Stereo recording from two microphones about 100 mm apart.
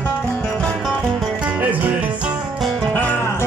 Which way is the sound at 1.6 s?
15° right (ahead or behind).